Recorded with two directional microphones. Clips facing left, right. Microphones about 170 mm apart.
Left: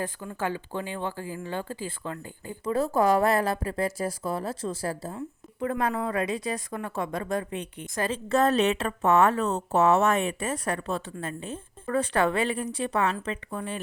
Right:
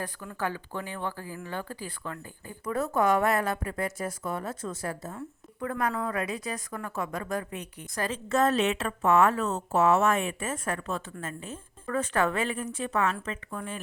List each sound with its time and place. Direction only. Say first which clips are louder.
0.0 s speech: left 2 dB; 20° left (ahead or behind)
5.1 s a woman's voice: left 3 dB; 20° left (ahead or behind)